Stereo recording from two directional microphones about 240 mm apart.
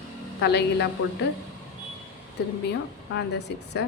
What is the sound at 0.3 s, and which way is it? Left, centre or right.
Speech, left.